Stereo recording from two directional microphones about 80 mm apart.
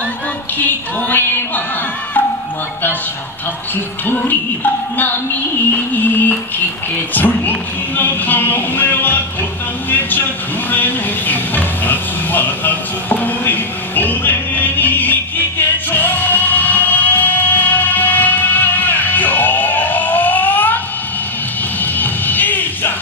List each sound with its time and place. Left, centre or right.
0.6 s music: left
5.7 s music: left
9.8 s speech: left
10.7 s vehicle: left
21.8 s music: left